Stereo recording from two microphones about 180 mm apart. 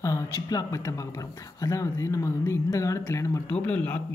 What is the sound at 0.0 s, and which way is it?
Speech, 20° left (ahead or behind).